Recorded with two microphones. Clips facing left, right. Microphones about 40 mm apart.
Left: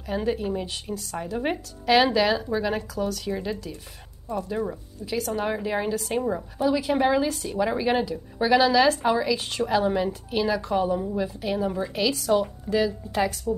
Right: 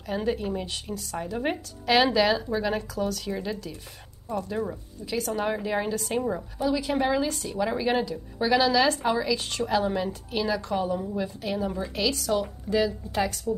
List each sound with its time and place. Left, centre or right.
0.0 s a woman's voice: centre